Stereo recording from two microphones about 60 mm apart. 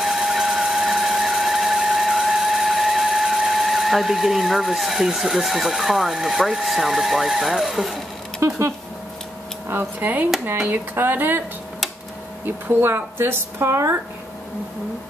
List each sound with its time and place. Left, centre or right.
0.0 s a sound: centre
8.4 s speech: right
9.7 s speech: right
12.4 s speech: right